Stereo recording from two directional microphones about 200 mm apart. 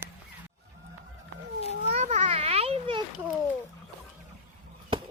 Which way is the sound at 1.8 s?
30° right (ahead or behind).